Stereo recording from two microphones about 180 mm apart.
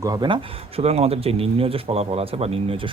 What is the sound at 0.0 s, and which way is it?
Speech, 20° right (ahead or behind).